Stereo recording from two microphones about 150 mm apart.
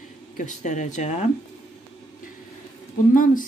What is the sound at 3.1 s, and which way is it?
Speech, 60° left (ahead or behind).